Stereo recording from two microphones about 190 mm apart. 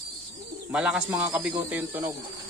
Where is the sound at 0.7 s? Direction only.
5° right (ahead or behind).